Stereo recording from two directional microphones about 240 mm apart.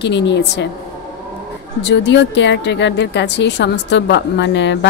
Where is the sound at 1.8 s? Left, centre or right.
Left.